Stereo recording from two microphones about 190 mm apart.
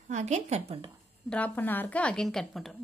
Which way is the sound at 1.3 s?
10° left (ahead or behind).